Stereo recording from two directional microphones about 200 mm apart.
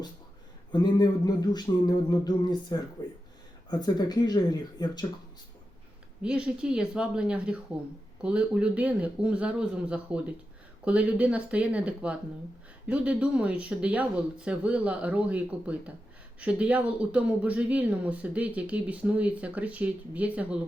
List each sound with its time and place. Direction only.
0.7 s speech: 20° left (ahead or behind)
6.2 s speech: 5° right (ahead or behind)